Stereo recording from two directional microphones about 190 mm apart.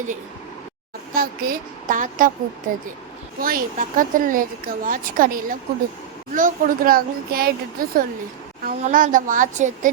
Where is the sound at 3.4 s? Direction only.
50° right (ahead or behind).